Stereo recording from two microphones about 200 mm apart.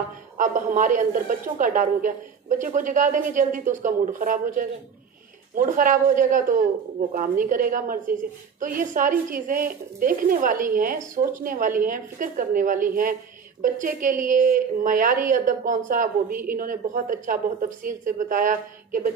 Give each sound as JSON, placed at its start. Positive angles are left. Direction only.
{"t": 0.4, "sound": "a woman's voice", "side_deg": -40}